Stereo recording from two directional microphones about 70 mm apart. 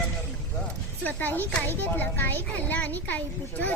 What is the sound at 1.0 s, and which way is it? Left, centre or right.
A child's voice, left.